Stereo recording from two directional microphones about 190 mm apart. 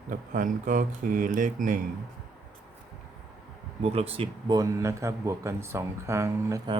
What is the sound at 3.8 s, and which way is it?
Speech, 30° right (ahead or behind).